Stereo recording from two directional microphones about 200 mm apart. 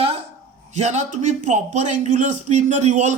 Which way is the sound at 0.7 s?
35° right (ahead or behind).